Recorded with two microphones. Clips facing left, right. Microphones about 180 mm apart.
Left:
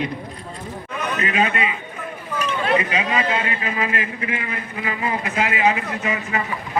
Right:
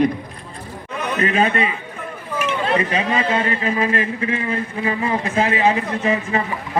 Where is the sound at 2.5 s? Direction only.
30° right (ahead or behind).